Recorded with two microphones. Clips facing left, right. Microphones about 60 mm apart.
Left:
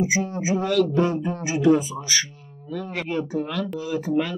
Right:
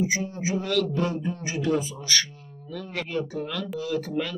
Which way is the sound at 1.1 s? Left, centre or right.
Left.